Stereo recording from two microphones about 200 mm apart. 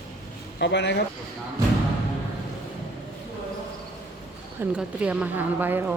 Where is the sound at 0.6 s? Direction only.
60° left (ahead or behind).